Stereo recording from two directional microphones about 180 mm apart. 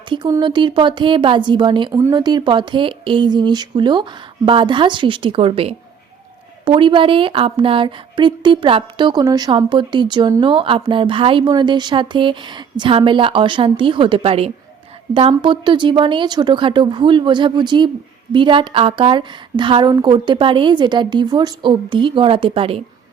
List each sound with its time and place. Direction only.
0.1 s a woman's voice: 25° right (ahead or behind)